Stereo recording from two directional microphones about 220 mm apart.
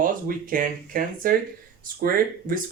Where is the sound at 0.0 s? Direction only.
40° right (ahead or behind).